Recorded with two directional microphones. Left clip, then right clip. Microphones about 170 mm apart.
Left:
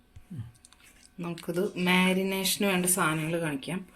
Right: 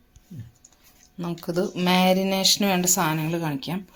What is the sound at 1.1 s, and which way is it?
Speech, 45° right (ahead or behind).